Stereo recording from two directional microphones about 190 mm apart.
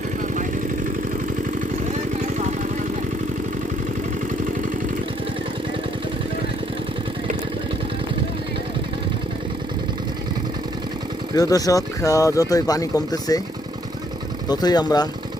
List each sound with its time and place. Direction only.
11.3 s speech: 20° left (ahead or behind)
14.4 s speech: 20° left (ahead or behind)